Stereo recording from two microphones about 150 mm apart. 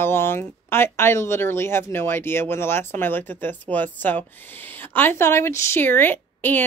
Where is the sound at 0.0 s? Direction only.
15° left (ahead or behind).